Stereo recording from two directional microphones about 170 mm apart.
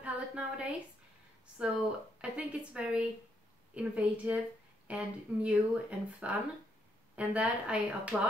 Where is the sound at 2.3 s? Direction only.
5° right (ahead or behind).